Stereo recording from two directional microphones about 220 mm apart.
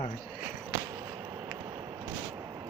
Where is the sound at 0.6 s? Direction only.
15° right (ahead or behind).